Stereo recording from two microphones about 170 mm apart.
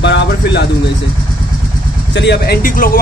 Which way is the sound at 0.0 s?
90° left.